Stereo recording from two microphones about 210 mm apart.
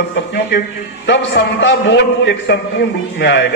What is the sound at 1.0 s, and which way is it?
A man's voice, 55° left (ahead or behind).